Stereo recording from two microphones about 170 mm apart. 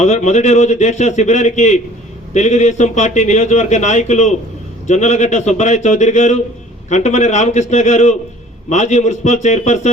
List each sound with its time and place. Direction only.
0.0 s a man's voice: 45° left (ahead or behind)